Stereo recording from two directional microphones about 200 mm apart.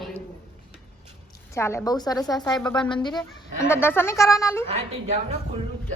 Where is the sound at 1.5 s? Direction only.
15° left (ahead or behind).